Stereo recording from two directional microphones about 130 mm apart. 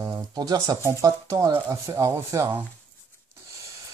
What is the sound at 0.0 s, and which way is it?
Speech, 30° right (ahead or behind).